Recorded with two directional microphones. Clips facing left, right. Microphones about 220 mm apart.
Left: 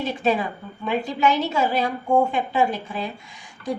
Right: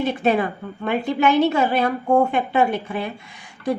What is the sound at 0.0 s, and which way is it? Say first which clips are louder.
A woman's voice: right 3 dB; 60° right (ahead or behind).